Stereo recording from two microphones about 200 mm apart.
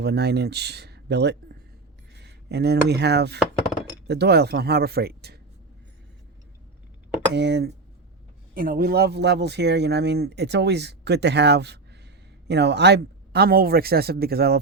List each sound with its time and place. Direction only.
0.0 s speech: 55° right (ahead or behind)
7.3 s speech: 55° right (ahead or behind)
8.5 s speech: 45° right (ahead or behind)